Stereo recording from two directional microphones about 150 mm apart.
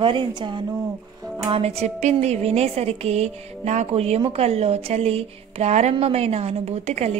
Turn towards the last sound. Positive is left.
turn(degrees=-45)  # may be behind; listen again after turning